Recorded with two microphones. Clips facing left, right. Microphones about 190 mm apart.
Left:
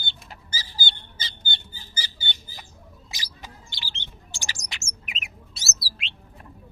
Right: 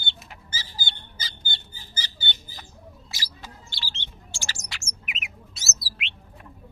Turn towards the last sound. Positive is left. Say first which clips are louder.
# right 1 dB
turn(degrees=35)  # may be behind; listen again after turning